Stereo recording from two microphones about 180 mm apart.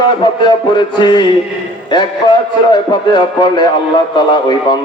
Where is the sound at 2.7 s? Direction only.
25° left (ahead or behind).